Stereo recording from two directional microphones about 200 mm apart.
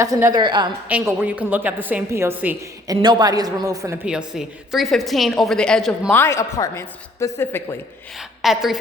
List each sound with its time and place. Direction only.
0.0 s a woman's voice: 15° right (ahead or behind)
0.9 s a woman's voice: 10° right (ahead or behind); by 7.8 s 10° left (ahead or behind)
8.4 s a woman's voice: centre (ahead or behind)